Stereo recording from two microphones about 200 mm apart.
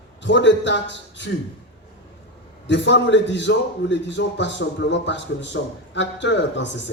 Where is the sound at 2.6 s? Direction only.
65° left (ahead or behind).